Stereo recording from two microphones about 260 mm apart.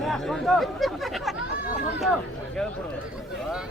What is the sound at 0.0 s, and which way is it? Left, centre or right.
Speech, centre.